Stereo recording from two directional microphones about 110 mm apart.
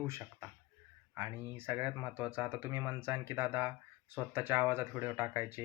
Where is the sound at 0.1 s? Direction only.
20° right (ahead or behind).